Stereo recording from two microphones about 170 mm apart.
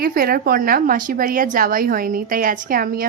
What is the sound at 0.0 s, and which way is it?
A woman's voice, 60° right (ahead or behind).